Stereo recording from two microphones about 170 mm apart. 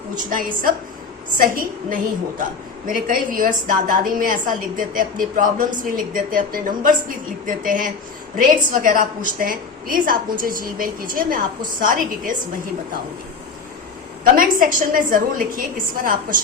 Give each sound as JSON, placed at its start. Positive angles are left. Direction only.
{"t": 0.3, "sound": "a woman's voice", "side_deg": -55}
{"t": 14.3, "sound": "a woman's voice", "side_deg": -55}